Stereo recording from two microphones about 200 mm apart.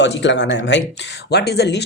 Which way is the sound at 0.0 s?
65° left (ahead or behind).